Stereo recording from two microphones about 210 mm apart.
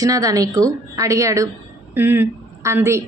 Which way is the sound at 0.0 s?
15° right (ahead or behind).